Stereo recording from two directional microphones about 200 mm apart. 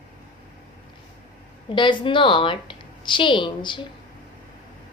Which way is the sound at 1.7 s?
25° left (ahead or behind).